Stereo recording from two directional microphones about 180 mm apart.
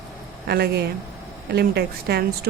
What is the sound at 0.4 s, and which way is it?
Speech, 60° right (ahead or behind).